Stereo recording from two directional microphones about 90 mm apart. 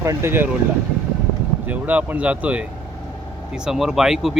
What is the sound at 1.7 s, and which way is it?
Speech, 20° right (ahead or behind).